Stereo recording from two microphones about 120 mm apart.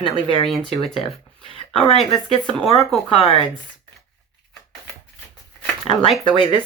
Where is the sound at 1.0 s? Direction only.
50° left (ahead or behind).